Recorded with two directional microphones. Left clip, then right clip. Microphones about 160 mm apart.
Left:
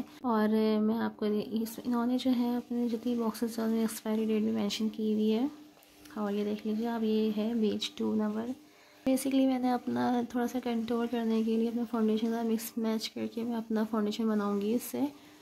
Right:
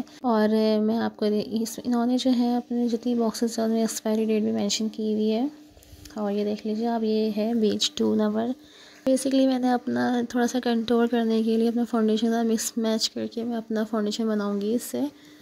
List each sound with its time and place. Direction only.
0.2 s speech: 35° right (ahead or behind)